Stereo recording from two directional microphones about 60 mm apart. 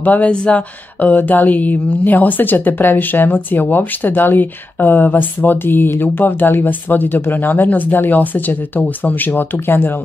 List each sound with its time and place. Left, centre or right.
0.0 s speech: left